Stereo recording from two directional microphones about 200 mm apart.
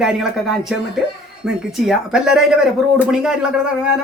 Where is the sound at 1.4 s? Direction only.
5° right (ahead or behind).